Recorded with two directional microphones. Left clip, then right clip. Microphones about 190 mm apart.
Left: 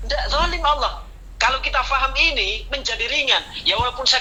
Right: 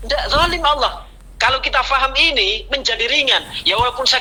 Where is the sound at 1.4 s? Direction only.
30° right (ahead or behind).